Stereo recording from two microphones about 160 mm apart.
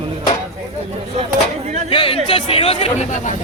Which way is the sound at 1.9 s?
35° left (ahead or behind).